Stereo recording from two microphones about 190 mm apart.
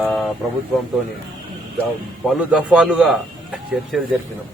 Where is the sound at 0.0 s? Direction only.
Centre (ahead or behind).